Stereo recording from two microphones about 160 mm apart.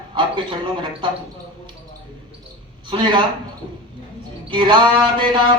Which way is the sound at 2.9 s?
30° right (ahead or behind).